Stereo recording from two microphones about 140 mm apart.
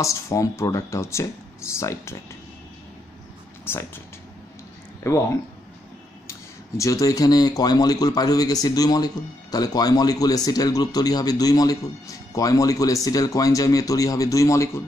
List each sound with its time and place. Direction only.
0.0 s speech: 20° left (ahead or behind)
3.6 s speech: 15° left (ahead or behind)
5.0 s speech: 20° left (ahead or behind)
6.8 s speech: 25° left (ahead or behind)